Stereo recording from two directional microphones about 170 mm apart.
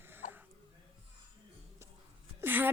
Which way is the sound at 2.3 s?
10° right (ahead or behind).